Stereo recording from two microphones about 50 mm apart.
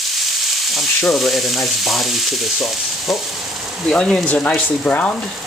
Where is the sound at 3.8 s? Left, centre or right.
Centre.